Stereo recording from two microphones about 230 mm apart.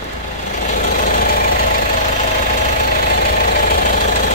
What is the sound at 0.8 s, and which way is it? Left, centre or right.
Engine, left.